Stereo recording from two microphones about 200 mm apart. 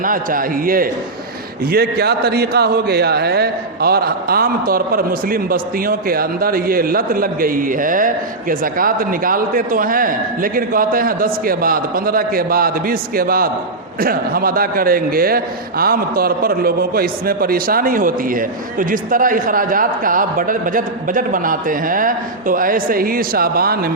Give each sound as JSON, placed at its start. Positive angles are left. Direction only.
{"t": 0.0, "sound": "a man's voice", "side_deg": -45}